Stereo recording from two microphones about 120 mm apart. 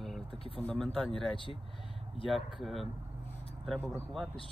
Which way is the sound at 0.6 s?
15° left (ahead or behind).